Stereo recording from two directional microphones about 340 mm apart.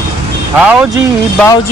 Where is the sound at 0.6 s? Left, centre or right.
Centre.